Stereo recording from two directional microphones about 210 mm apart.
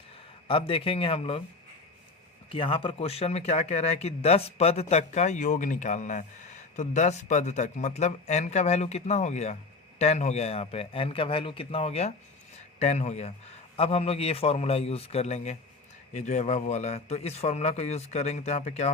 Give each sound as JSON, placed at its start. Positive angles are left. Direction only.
{"t": 0.4, "sound": "a man's voice", "side_deg": 25}
{"t": 2.5, "sound": "a man's voice", "side_deg": 25}